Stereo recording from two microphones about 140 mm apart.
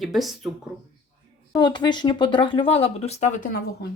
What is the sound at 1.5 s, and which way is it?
Speech, 30° left (ahead or behind).